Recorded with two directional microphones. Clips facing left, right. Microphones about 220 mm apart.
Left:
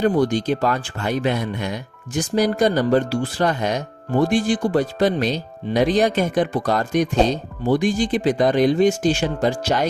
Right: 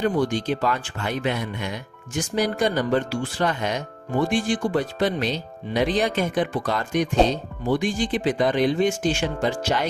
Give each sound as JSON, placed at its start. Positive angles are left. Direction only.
{"t": 0.0, "sound": "speech", "side_deg": 40}